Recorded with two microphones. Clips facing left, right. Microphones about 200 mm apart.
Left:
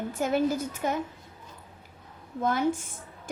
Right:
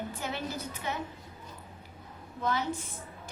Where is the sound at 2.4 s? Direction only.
50° left (ahead or behind).